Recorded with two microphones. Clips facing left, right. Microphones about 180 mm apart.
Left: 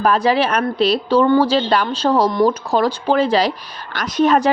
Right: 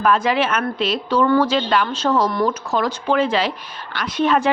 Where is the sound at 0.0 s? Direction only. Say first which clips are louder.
Left 2 dB; 35° left (ahead or behind).